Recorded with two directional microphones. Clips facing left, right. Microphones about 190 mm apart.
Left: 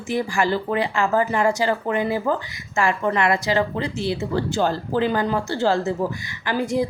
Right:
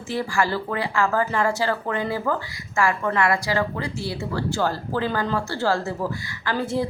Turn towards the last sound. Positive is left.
turn(degrees=15)  # may be behind; listen again after turning